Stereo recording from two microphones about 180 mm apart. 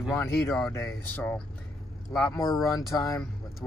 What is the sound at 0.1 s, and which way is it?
Speech, 15° left (ahead or behind).